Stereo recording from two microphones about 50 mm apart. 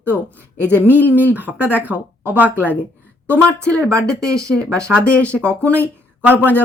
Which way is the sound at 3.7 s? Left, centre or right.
Left.